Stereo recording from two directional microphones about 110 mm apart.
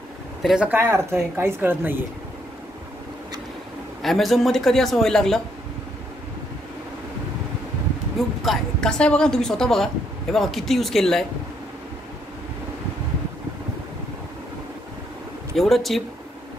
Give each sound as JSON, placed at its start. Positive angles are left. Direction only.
{"t": 0.4, "sound": "speech", "side_deg": 0}
{"t": 0.7, "sound": "speech", "side_deg": -20}
{"t": 4.0, "sound": "a woman's voice", "side_deg": 0}
{"t": 8.4, "sound": "a woman's voice", "side_deg": 5}
{"t": 15.5, "sound": "a woman's voice", "side_deg": 0}